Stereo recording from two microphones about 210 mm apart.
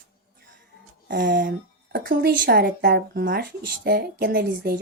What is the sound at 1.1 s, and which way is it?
Speech, 40° right (ahead or behind).